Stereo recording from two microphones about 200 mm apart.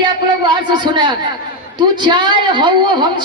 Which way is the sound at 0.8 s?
20° right (ahead or behind).